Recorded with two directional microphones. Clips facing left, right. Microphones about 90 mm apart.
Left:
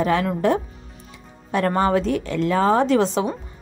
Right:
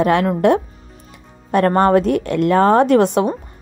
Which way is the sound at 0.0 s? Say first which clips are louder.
Right 5 dB; 60° right (ahead or behind).